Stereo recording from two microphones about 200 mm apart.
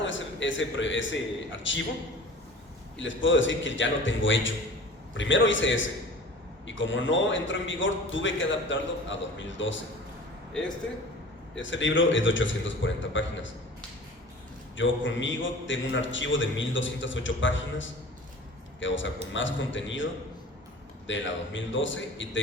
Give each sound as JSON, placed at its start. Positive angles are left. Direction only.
{"t": 0.0, "sound": "a man's voice", "side_deg": 70}
{"t": 3.0, "sound": "a man's voice", "side_deg": 70}
{"t": 11.5, "sound": "a man's voice", "side_deg": 70}
{"t": 14.8, "sound": "a man's voice", "side_deg": 70}
{"t": 21.1, "sound": "a man's voice", "side_deg": 70}